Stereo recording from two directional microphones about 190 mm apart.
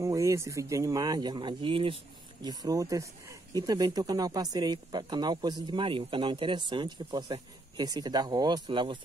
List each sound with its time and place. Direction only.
0.0 s speech: 15° right (ahead or behind)